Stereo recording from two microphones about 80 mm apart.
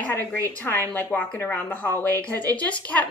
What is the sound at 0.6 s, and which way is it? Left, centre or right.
A woman's voice, left.